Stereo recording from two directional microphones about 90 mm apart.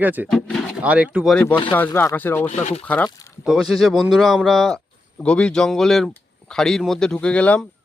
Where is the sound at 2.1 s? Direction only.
20° left (ahead or behind).